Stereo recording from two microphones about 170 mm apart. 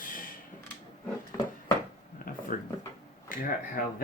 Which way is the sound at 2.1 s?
55° left (ahead or behind).